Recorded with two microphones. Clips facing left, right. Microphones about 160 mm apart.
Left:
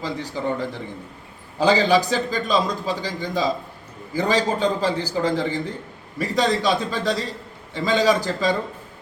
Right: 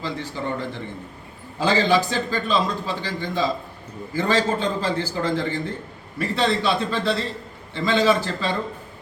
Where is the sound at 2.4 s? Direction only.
40° left (ahead or behind).